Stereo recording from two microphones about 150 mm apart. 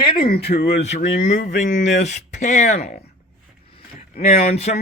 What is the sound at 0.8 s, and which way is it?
Speech, 50° left (ahead or behind).